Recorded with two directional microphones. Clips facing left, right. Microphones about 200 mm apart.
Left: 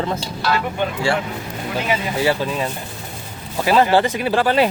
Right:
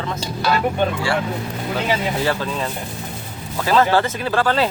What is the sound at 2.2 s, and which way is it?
Speech, 15° left (ahead or behind).